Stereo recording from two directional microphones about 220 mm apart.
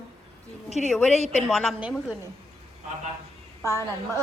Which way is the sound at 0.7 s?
30° left (ahead or behind).